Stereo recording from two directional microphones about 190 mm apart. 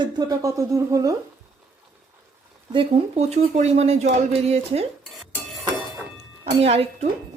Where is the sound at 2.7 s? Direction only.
30° right (ahead or behind).